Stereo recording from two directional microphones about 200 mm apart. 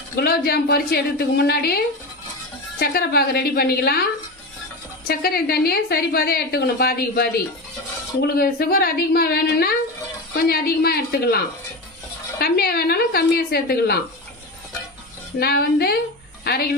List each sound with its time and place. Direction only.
0.2 s a woman's voice: 50° left (ahead or behind)
8.4 s a woman's voice: 50° left (ahead or behind)
12.4 s a woman's voice: 50° left (ahead or behind)
15.4 s a woman's voice: 50° left (ahead or behind)